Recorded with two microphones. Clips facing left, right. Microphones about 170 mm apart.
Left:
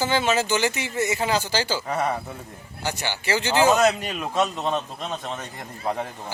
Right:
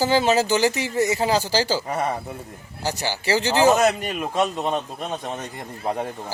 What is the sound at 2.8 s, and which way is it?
Speech, 35° right (ahead or behind).